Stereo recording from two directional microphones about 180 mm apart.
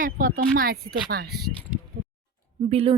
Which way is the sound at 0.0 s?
50° right (ahead or behind).